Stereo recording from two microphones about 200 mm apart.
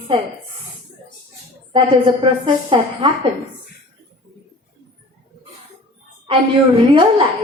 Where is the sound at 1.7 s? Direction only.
25° right (ahead or behind).